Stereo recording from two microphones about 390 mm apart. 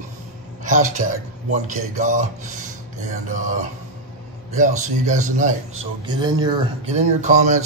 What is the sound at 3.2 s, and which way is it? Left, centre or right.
Speech, centre.